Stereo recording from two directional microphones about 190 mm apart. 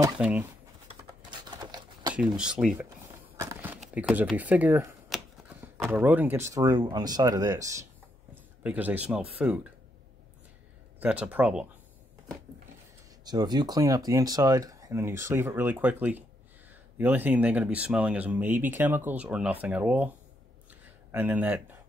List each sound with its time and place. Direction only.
0.2 s speech: 5° right (ahead or behind)
1.3 s a sound: 25° right (ahead or behind)
2.1 s speech: 5° right (ahead or behind)
3.3 s a sound: 10° right (ahead or behind)
3.9 s speech: 10° right (ahead or behind)
11.0 s speech: 5° right (ahead or behind)
13.2 s speech: 20° right (ahead or behind)
21.1 s speech: 10° right (ahead or behind)